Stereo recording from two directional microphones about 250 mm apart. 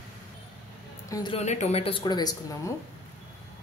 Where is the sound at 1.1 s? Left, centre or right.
Left.